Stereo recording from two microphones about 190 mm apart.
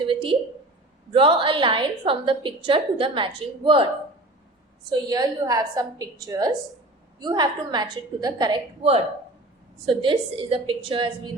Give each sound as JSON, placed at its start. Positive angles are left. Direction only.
{"t": 0.0, "sound": "a sound", "side_deg": -25}
{"t": 1.1, "sound": "a woman's voice", "side_deg": -25}
{"t": 4.9, "sound": "a woman's voice", "side_deg": -20}
{"t": 9.8, "sound": "a woman's voice", "side_deg": -25}